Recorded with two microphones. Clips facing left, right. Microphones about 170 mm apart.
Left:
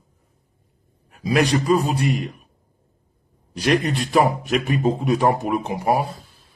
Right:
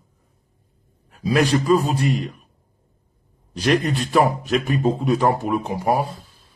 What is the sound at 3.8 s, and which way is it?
A man's voice, 10° left (ahead or behind).